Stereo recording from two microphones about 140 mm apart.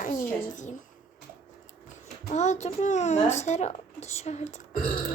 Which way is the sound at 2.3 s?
55° left (ahead or behind).